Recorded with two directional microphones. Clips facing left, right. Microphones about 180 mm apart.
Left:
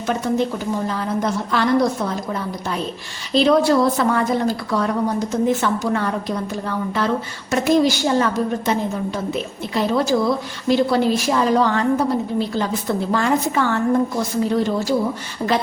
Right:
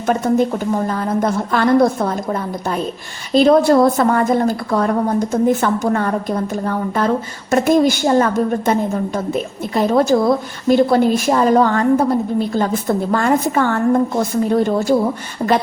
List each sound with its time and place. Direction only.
0.0 s a woman's voice: 45° right (ahead or behind)